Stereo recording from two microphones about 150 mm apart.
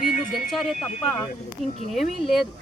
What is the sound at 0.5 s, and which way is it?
Speech, centre (ahead or behind).